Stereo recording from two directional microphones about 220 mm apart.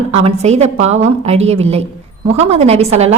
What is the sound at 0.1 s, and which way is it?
A woman's voice, 30° right (ahead or behind).